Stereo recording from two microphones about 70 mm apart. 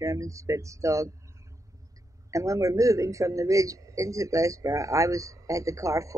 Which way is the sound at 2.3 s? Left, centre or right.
Right.